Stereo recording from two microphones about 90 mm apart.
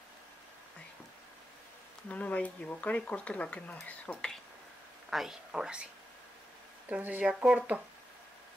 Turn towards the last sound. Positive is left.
turn(degrees=-10)  # may be behind; listen again after turning